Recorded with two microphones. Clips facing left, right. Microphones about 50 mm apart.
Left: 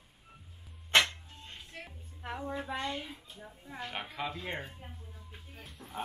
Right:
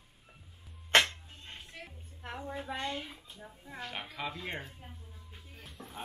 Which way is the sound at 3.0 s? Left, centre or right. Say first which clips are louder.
Even; centre.